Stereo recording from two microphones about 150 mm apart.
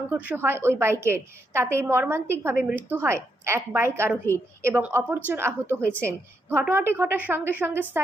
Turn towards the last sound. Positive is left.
turn(degrees=-15)  # may be behind; listen again after turning